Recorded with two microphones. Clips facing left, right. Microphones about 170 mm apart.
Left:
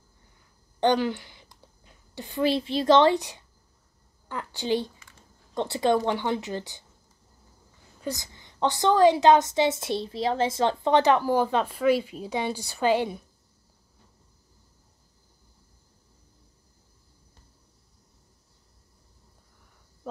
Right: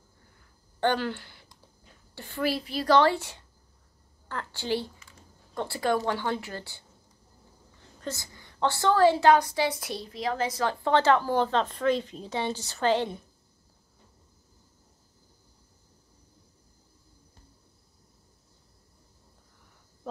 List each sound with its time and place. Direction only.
0.7 s a woman's voice: 15° left (ahead or behind)
8.0 s a woman's voice: 15° left (ahead or behind)